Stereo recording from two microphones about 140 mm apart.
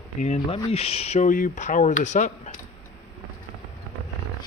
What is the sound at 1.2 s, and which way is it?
Speech, 70° left (ahead or behind).